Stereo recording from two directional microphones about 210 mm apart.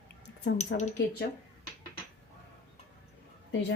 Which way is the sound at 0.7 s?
55° left (ahead or behind).